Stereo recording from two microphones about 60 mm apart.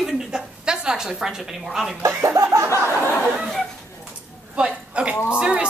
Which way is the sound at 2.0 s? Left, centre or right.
Right.